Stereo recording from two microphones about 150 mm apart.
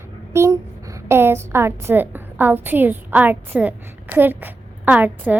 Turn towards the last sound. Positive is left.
turn(degrees=-10)  # may be behind; listen again after turning